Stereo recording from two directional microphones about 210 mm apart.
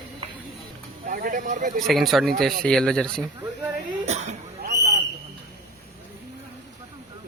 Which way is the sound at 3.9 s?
35° right (ahead or behind).